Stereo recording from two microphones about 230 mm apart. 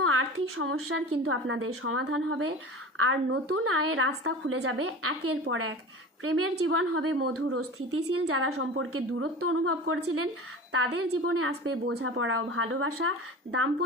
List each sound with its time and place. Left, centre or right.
0.0 s a woman's voice: right